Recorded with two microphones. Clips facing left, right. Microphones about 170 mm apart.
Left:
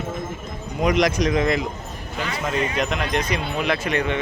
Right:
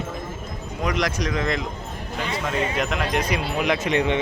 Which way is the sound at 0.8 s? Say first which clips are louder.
Left 5 dB; 20° left (ahead or behind).